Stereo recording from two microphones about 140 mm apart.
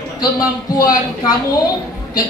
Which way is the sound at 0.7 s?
25° left (ahead or behind).